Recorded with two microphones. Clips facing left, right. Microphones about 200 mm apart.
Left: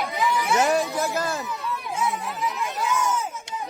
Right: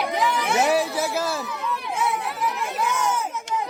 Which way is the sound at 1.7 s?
70° right (ahead or behind).